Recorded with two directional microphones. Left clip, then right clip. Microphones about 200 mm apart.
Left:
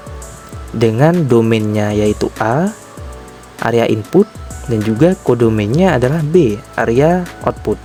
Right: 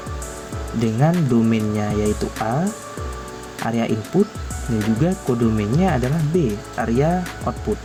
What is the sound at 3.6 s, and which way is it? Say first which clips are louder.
Speech: left 10 dB; 60° left (ahead or behind).